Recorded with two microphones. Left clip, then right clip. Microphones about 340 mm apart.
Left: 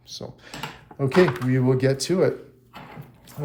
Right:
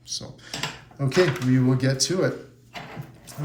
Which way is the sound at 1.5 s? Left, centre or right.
Centre.